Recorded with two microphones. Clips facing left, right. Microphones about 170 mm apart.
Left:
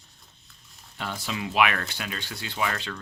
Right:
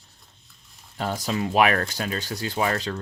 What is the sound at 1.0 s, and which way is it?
Speech, 40° right (ahead or behind).